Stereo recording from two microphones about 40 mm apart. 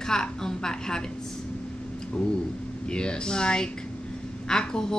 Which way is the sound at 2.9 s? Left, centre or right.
Left.